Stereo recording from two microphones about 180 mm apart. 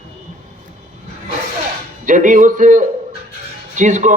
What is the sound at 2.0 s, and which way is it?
A man's voice, 45° right (ahead or behind).